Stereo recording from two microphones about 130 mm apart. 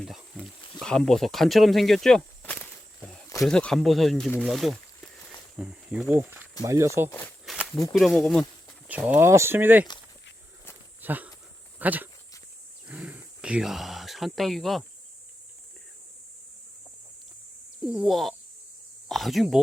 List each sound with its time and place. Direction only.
0.0 s speech: centre (ahead or behind)
6.6 s speech: 25° right (ahead or behind)
7.1 s speech: 15° left (ahead or behind)
7.4 s walk: centre (ahead or behind)
7.9 s speech: centre (ahead or behind)
8.9 s speech: 10° right (ahead or behind)
11.0 s speech: 15° right (ahead or behind)
17.8 s speech: 5° right (ahead or behind)